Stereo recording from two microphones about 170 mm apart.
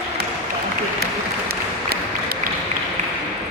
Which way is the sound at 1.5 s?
65° right (ahead or behind).